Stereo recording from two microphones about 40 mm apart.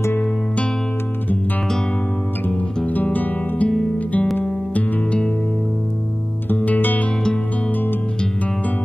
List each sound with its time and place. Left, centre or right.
2.9 s guitar: left
6.5 s music: left